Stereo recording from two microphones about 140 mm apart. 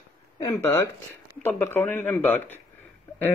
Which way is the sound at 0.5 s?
20° left (ahead or behind).